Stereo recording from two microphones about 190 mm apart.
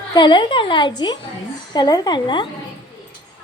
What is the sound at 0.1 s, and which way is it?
A woman's voice, 25° left (ahead or behind).